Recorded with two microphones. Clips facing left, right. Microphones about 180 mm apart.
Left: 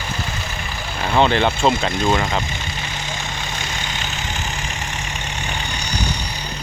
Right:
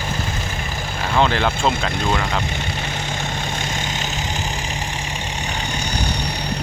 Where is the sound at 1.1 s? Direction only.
Centre (ahead or behind).